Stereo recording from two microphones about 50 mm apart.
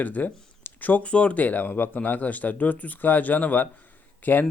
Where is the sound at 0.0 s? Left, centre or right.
Left.